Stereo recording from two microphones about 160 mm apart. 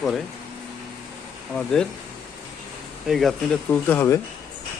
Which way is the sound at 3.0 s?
Centre (ahead or behind).